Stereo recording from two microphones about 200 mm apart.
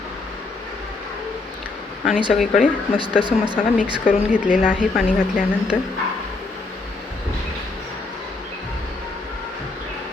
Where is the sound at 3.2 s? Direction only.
20° right (ahead or behind).